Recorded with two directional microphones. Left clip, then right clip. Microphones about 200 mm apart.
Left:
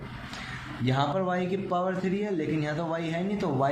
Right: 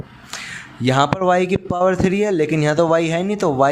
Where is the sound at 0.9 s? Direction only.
50° right (ahead or behind).